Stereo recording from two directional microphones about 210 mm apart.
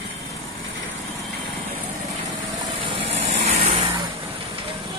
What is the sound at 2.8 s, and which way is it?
Vehicle, 25° right (ahead or behind).